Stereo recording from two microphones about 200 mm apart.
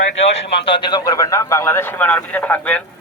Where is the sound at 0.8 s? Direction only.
20° left (ahead or behind).